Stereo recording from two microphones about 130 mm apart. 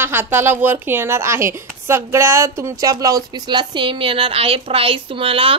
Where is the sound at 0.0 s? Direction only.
15° right (ahead or behind).